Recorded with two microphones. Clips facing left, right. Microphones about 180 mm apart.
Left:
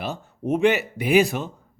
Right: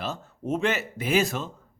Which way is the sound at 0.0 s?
15° left (ahead or behind).